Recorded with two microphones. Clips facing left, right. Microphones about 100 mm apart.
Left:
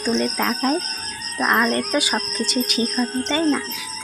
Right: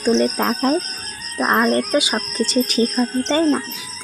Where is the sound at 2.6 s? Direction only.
35° right (ahead or behind).